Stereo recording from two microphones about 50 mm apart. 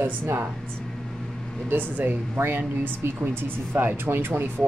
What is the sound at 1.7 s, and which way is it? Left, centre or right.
Speech, right.